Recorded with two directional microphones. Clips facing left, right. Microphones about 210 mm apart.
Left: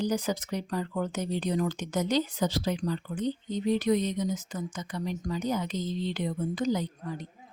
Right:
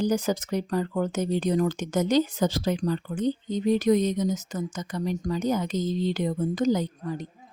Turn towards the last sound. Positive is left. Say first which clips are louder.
# right 5 dB
turn(degrees=-45)  # may be behind; listen again after turning